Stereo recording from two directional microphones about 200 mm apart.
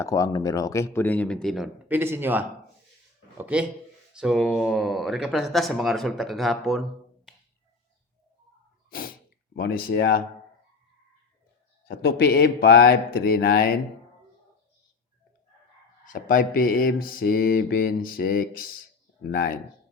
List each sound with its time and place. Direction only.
0.0 s speech: 15° left (ahead or behind); by 6.8 s centre (ahead or behind)
8.9 s a sound: 45° left (ahead or behind)
9.6 s mantra: 45° left (ahead or behind)
11.9 s mantra: 50° left (ahead or behind)
16.0 s mantra: 40° left (ahead or behind)